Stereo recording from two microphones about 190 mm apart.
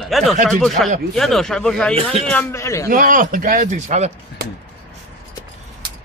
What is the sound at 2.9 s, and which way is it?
Speech, 45° right (ahead or behind).